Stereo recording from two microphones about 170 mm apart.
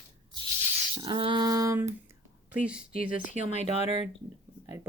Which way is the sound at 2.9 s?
55° left (ahead or behind).